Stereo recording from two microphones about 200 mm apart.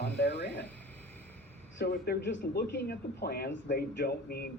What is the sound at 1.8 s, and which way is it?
Speech, 50° left (ahead or behind).